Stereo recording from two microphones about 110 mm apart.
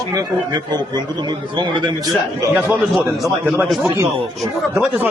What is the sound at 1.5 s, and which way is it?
Speech, 40° right (ahead or behind).